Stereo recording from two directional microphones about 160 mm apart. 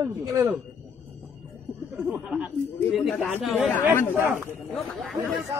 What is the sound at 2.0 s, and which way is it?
Speech, 10° right (ahead or behind).